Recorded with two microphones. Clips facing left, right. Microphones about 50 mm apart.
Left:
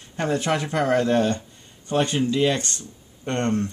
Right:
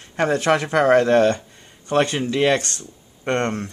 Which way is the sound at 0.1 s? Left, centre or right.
Right.